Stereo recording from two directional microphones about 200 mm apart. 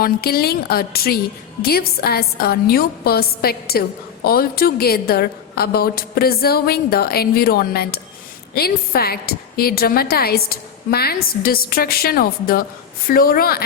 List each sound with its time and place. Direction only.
0.0 s a woman's voice: 50° left (ahead or behind)